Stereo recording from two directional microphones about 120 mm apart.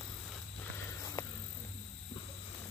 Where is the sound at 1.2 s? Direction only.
25° left (ahead or behind).